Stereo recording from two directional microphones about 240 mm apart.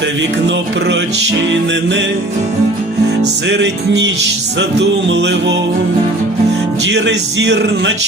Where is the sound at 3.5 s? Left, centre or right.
Right.